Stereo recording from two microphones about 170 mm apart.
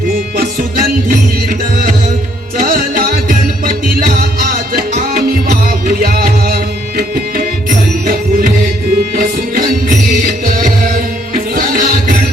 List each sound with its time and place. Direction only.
0.3 s music: 60° right (ahead or behind)
2.6 s music: 55° right (ahead or behind)
11.3 s music: 55° right (ahead or behind)